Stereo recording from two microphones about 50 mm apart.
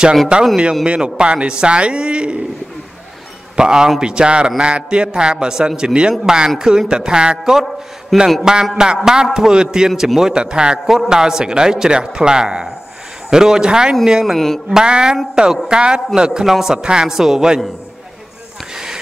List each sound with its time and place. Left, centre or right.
0.3 s a man's voice: centre
3.5 s a man's voice: centre
8.1 s speech: centre
8.7 s a man's voice: centre
14.2 s speech: centre
14.7 s a man's voice: centre
16.4 s a man's voice: centre